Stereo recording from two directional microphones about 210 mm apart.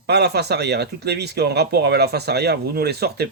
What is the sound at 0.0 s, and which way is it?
Speech, 50° right (ahead or behind).